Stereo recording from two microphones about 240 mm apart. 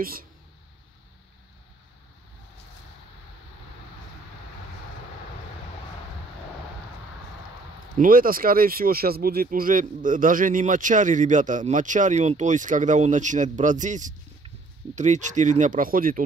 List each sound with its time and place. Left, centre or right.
0.0 s speech: right
8.0 s speech: right